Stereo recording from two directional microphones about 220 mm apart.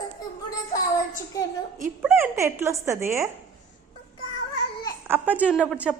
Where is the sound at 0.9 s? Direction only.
15° left (ahead or behind).